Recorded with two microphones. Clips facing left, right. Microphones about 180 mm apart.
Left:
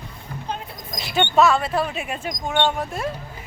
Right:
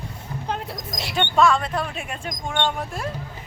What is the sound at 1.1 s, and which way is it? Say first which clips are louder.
Speech: left 2 dB; 5° left (ahead or behind).